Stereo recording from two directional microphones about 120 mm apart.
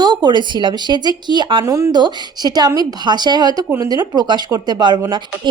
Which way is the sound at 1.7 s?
25° right (ahead or behind).